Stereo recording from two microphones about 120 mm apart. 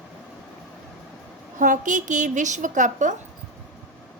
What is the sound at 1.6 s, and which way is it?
A woman's voice, 90° right.